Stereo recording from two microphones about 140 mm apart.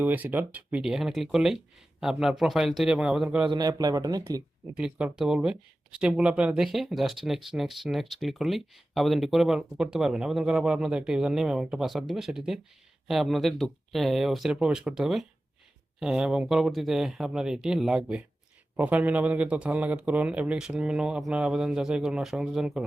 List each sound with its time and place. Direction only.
0.0 s speech: 15° right (ahead or behind)
3.4 s speech: 30° right (ahead or behind)
4.8 s speech: 5° right (ahead or behind)